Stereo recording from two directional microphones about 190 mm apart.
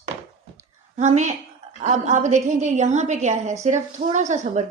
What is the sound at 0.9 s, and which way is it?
A woman's voice, 35° right (ahead or behind).